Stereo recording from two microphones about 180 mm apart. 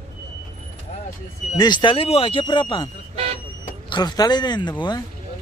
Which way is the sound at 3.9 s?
25° left (ahead or behind).